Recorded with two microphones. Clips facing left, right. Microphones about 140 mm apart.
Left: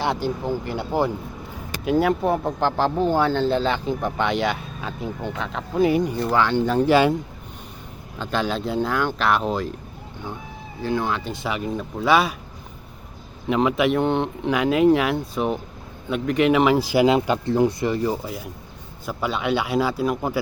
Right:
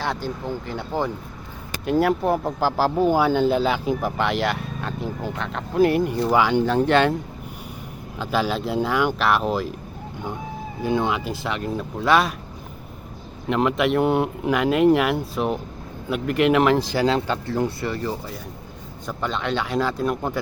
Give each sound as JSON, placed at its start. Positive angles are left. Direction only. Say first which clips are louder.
{"t": 0.0, "sound": "speech", "louder": "left 3 dB", "side_deg": 15}
{"t": 1.8, "sound": "speech", "louder": "even", "side_deg": 0}
{"t": 6.7, "sound": "speech", "louder": "left 1 dB", "side_deg": 5}
{"t": 8.2, "sound": "speech", "louder": "right 1 dB", "side_deg": -5}
{"t": 10.8, "sound": "speech", "louder": "right 2 dB", "side_deg": -15}
{"t": 11.2, "sound": "speech", "louder": "even", "side_deg": 0}
{"t": 13.5, "sound": "speech", "louder": "left 1 dB", "side_deg": 0}